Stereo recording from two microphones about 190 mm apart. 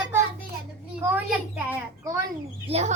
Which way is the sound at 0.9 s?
10° right (ahead or behind).